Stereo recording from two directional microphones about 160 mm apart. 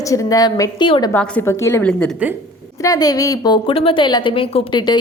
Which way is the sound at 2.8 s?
25° left (ahead or behind).